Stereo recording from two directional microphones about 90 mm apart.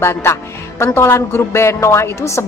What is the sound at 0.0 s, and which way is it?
Speech, 30° left (ahead or behind).